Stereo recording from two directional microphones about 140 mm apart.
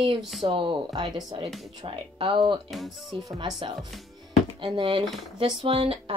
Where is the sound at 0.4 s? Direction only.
40° right (ahead or behind).